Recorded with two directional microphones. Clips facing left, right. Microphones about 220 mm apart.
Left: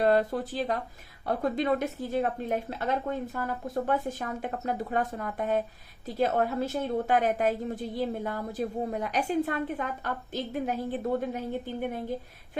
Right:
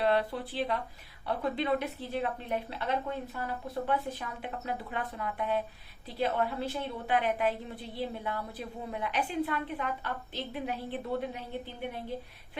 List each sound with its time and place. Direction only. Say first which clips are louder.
0.0 s a woman's voice: left 4 dB; 45° left (ahead or behind)